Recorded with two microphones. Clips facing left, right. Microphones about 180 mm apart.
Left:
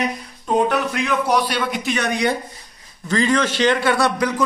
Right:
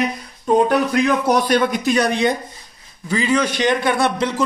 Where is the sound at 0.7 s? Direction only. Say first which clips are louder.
Right 4 dB; 40° right (ahead or behind).